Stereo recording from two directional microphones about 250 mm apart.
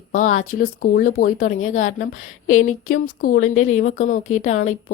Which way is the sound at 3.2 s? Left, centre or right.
Left.